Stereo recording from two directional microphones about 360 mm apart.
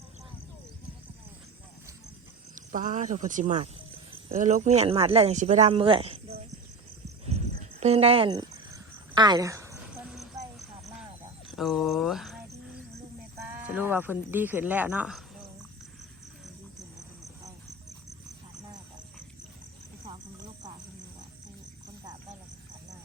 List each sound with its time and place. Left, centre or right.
2.6 s speech: right
7.3 s cricket: centre
11.4 s speech: centre
20.1 s cricket: centre